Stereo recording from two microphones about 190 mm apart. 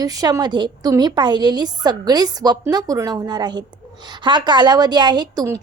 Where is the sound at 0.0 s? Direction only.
20° right (ahead or behind).